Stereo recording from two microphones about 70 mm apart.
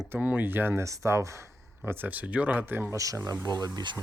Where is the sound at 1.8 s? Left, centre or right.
Right.